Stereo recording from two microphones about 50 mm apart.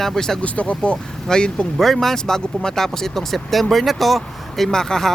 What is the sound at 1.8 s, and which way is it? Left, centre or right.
Speech, centre.